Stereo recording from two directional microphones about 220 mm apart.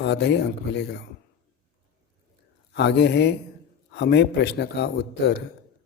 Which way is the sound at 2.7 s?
50° left (ahead or behind).